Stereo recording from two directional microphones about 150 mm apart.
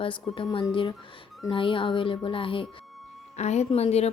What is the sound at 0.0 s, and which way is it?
Speech, 35° left (ahead or behind).